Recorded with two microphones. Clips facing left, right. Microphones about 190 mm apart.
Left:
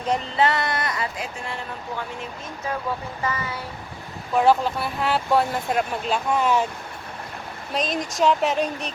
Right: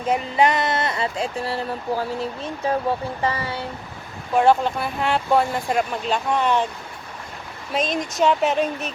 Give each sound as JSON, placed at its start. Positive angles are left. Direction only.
{"t": 0.1, "sound": "speech", "side_deg": -15}
{"t": 4.4, "sound": "speech", "side_deg": 0}
{"t": 7.7, "sound": "speech", "side_deg": 0}